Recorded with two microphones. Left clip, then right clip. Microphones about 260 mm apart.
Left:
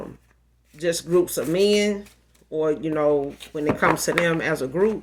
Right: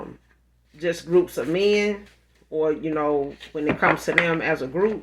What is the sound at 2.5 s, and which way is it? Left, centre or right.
Speech, left.